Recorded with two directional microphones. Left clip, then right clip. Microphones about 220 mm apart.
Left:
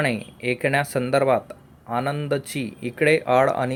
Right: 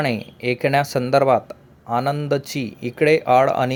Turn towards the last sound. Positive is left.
turn(degrees=-15)  # may be behind; listen again after turning